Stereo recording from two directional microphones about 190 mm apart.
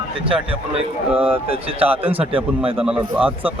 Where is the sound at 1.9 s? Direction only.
30° right (ahead or behind).